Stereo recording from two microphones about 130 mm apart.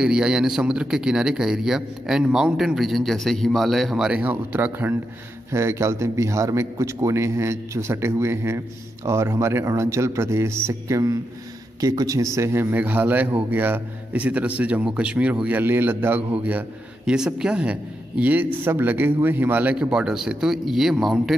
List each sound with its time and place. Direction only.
0.0 s a man's voice: 5° right (ahead or behind)